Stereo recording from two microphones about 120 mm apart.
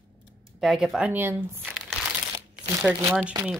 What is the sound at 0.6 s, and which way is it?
Speech, 5° right (ahead or behind).